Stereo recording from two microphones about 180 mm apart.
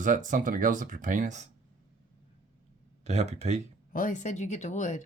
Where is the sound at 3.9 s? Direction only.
45° left (ahead or behind).